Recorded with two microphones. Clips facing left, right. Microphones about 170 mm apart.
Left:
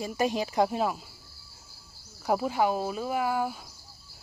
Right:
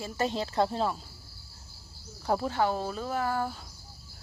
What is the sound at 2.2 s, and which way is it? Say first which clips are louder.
Speech: left 2 dB; 10° left (ahead or behind).